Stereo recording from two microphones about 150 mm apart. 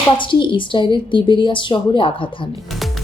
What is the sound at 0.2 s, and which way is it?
A woman's voice, 35° left (ahead or behind).